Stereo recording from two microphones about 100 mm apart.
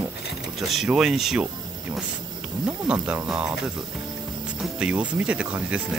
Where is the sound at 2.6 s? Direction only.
10° right (ahead or behind).